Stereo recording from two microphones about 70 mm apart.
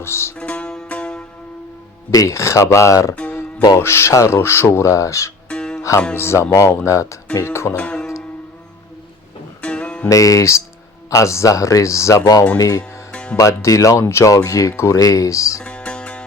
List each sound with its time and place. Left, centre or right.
0.0 s speech: left
0.3 s music: centre
2.0 s speech: left
5.5 s music: centre
6.1 s speech: left
7.8 s music: centre
9.6 s music: centre
10.1 s speech: left
13.1 s music: centre
13.3 s speech: left
14.0 s speech: left
15.6 s music: centre